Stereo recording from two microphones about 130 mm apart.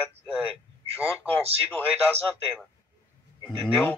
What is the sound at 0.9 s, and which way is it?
Speech, 20° left (ahead or behind).